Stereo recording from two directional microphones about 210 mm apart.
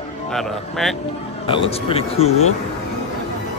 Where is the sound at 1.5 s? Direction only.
25° left (ahead or behind).